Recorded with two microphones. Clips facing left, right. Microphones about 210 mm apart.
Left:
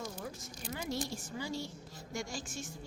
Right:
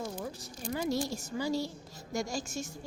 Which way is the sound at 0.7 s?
40° right (ahead or behind).